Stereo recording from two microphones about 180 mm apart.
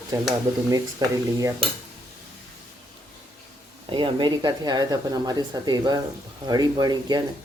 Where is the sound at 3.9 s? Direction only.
25° right (ahead or behind).